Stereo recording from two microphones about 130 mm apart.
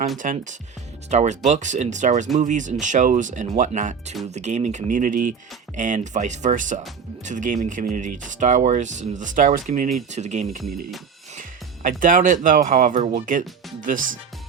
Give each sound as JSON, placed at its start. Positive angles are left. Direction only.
{"t": 0.2, "sound": "speech", "side_deg": -90}
{"t": 1.1, "sound": "speech", "side_deg": -60}
{"t": 5.7, "sound": "speech", "side_deg": -70}
{"t": 10.1, "sound": "speech", "side_deg": -60}
{"t": 11.3, "sound": "speech", "side_deg": -90}
{"t": 13.8, "sound": "speech", "side_deg": -90}